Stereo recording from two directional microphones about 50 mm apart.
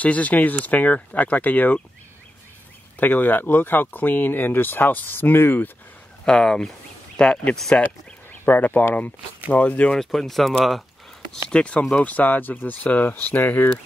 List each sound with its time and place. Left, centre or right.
0.0 s speech: left
3.0 s speech: left
6.2 s speech: centre
8.5 s speech: left
9.9 s speech: centre
11.4 s speech: left
11.9 s speech: left